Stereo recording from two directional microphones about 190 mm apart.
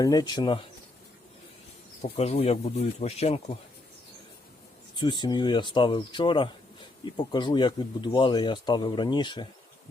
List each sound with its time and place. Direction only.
0.0 s speech: 20° left (ahead or behind)
2.0 s speech: 35° left (ahead or behind)
4.9 s speech: 25° left (ahead or behind)